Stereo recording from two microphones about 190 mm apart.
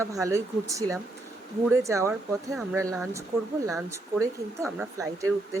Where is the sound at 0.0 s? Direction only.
15° right (ahead or behind).